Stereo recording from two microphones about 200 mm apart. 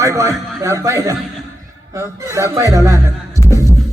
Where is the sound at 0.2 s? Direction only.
15° right (ahead or behind).